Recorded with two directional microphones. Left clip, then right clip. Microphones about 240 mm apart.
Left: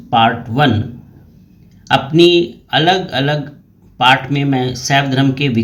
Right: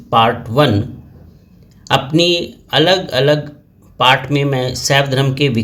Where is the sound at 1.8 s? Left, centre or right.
Right.